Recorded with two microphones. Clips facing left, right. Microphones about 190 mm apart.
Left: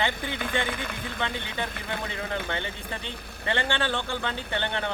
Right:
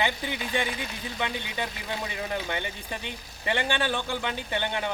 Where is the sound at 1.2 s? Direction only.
15° right (ahead or behind).